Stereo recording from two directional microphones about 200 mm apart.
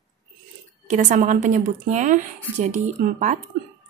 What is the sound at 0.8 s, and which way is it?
A woman's voice, 40° right (ahead or behind).